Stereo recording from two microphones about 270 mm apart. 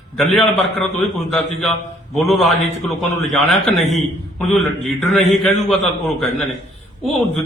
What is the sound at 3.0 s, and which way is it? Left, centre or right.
Speech, centre.